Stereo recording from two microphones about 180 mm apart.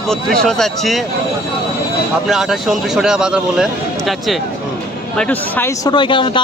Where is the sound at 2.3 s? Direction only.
Centre (ahead or behind).